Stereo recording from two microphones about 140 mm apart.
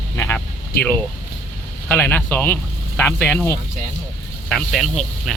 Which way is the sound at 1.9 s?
10° left (ahead or behind).